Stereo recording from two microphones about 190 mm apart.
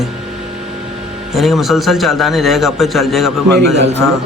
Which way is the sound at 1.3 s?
Centre (ahead or behind).